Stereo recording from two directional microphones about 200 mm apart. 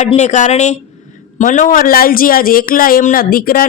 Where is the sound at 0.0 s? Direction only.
35° left (ahead or behind).